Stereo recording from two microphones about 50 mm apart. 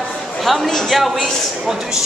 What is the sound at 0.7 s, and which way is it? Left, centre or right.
Speech, centre.